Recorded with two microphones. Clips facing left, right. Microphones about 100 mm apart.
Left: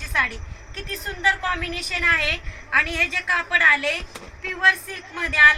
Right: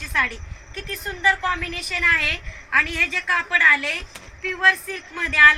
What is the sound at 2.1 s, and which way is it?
A woman's voice, 20° left (ahead or behind).